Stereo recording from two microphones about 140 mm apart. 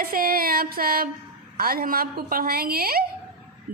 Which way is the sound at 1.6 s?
90° right.